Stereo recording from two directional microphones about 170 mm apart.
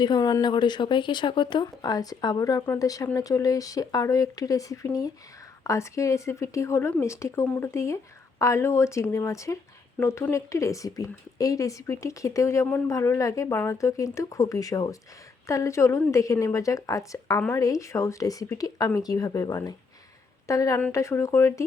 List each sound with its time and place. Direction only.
0.0 s a woman's voice: 25° left (ahead or behind)